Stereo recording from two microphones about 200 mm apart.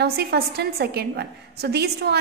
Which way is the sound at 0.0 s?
50° right (ahead or behind).